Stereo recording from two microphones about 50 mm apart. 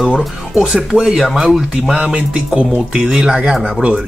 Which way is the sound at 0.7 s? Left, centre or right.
Centre.